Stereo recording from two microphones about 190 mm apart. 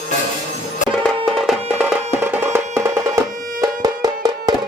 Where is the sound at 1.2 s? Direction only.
Centre (ahead or behind).